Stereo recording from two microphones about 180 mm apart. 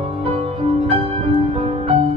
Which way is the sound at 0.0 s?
30° right (ahead or behind).